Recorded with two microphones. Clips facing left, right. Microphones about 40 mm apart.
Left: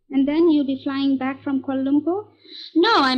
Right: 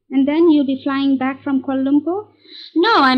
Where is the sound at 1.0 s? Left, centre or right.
Centre.